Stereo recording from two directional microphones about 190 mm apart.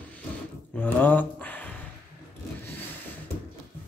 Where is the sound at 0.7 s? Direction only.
10° left (ahead or behind).